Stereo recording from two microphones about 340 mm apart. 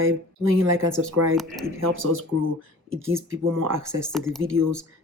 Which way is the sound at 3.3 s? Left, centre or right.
Right.